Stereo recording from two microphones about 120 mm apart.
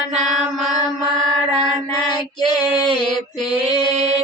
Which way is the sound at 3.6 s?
55° right (ahead or behind).